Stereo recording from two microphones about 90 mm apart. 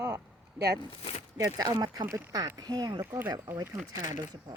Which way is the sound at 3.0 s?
25° right (ahead or behind).